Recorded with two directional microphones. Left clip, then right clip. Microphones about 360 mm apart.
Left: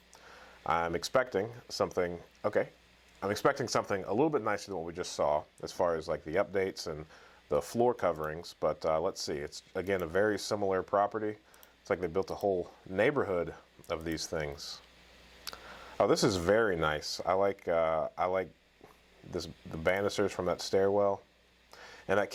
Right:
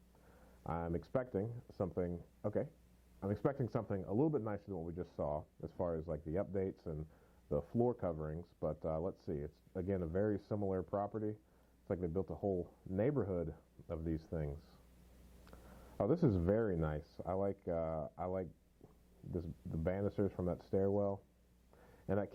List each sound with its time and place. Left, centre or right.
0.3 s speech: centre
12.9 s speech: centre
21.8 s a sound: centre